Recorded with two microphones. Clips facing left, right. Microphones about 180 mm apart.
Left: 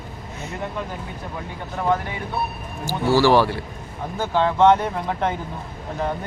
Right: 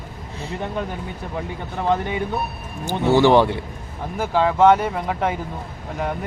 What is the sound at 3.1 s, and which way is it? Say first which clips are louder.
Speech: right 2 dB; 20° right (ahead or behind).